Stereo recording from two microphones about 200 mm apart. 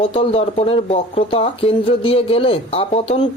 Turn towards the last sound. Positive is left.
turn(degrees=30)  # may be behind; listen again after turning